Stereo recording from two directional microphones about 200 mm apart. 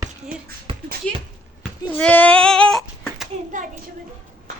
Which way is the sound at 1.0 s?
5° left (ahead or behind).